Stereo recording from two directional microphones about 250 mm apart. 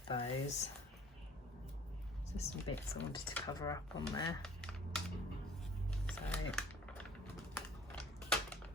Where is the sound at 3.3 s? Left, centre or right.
Centre.